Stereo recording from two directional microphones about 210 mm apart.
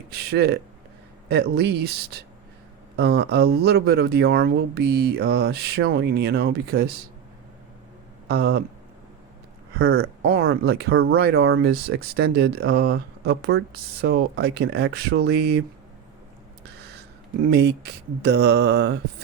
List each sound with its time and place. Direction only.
0.1 s speech: 50° right (ahead or behind)
2.9 s speech: 50° right (ahead or behind)
8.3 s speech: 50° right (ahead or behind)
10.2 s speech: 50° right (ahead or behind)
11.7 s speech: 50° right (ahead or behind)
16.9 s a sound: 50° right (ahead or behind)
18.2 s speech: 55° right (ahead or behind)